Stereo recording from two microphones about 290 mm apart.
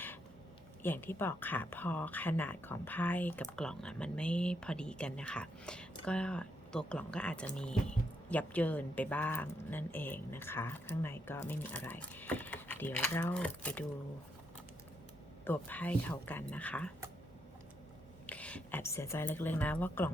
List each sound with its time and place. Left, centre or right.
0.8 s speech: centre
15.4 s speech: centre
18.3 s speech: centre